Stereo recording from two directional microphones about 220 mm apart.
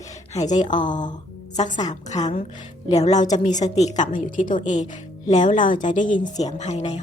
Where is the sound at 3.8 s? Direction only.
30° left (ahead or behind).